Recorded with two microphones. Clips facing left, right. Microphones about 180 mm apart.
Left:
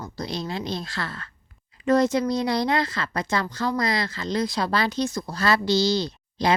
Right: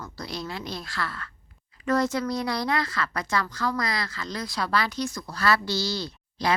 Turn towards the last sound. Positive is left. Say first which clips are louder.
# left 4 dB
turn(degrees=20)  # may be behind; listen again after turning